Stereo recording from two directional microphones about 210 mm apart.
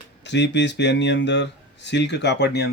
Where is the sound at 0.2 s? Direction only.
55° left (ahead or behind).